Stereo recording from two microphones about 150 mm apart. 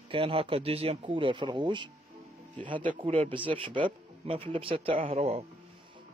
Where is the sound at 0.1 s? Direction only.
40° right (ahead or behind).